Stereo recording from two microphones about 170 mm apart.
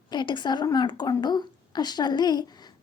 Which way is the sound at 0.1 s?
25° left (ahead or behind).